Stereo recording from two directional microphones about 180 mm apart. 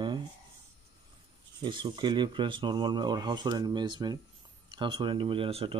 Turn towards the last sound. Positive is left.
turn(degrees=-30)  # may be behind; listen again after turning